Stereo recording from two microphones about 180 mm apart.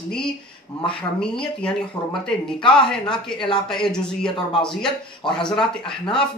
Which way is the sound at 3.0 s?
25° left (ahead or behind).